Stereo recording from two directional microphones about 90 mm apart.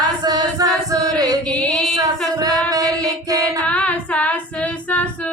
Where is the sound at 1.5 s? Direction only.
5° left (ahead or behind).